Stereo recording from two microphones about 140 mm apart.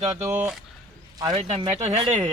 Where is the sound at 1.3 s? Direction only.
45° right (ahead or behind).